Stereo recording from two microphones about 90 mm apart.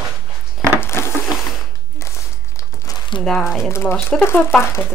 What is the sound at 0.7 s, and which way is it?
Wood, 30° left (ahead or behind).